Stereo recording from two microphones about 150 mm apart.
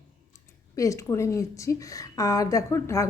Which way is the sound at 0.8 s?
20° left (ahead or behind).